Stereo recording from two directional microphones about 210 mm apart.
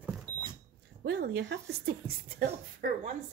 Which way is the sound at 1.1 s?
50° right (ahead or behind).